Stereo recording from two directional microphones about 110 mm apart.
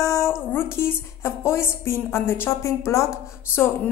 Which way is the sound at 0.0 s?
30° left (ahead or behind).